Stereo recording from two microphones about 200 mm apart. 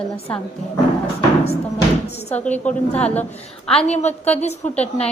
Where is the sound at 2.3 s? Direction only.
5° left (ahead or behind).